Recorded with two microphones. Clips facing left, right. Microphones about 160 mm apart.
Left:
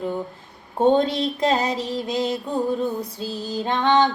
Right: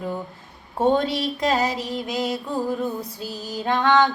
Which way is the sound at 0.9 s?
25° left (ahead or behind).